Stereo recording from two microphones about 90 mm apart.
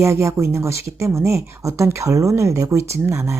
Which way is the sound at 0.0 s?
30° right (ahead or behind).